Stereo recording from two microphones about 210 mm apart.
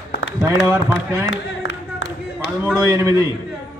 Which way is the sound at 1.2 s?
65° left (ahead or behind).